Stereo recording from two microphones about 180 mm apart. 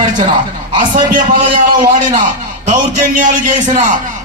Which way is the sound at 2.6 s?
45° right (ahead or behind).